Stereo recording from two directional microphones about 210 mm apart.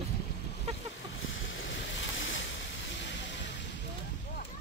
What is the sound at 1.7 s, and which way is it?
Ocean, 65° left (ahead or behind).